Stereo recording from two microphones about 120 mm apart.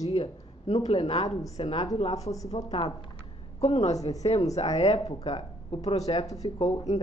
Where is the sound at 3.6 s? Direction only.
65° left (ahead or behind).